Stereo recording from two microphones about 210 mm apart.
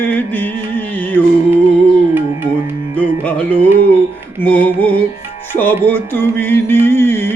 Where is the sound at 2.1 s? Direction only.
10° right (ahead or behind).